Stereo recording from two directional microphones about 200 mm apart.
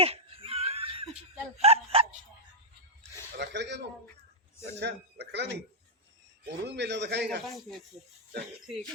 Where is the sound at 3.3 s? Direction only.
60° right (ahead or behind).